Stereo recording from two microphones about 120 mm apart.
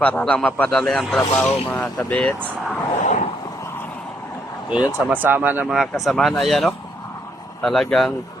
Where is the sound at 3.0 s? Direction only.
80° left.